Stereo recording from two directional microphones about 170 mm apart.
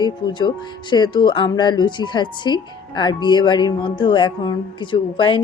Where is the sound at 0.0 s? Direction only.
25° left (ahead or behind).